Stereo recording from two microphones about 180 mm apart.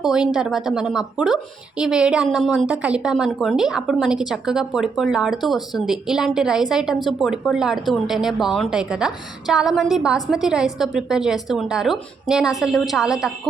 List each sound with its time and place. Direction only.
0.0 s a woman's voice: 5° right (ahead or behind)